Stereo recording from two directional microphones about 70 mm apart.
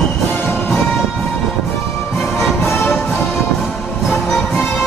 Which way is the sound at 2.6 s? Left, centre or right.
Left.